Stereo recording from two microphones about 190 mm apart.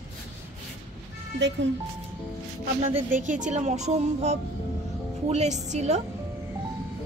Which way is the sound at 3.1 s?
40° right (ahead or behind).